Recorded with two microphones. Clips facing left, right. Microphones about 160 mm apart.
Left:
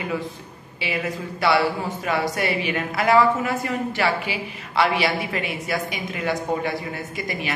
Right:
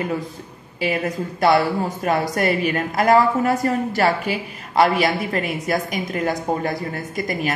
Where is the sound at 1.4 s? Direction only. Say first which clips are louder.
Right 3 dB; 45° right (ahead or behind).